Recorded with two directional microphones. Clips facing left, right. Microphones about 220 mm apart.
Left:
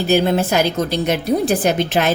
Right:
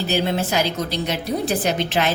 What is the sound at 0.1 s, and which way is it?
A woman's voice, 50° left (ahead or behind).